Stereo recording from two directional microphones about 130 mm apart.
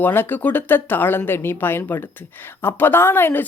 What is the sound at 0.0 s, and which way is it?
Speech, 15° left (ahead or behind).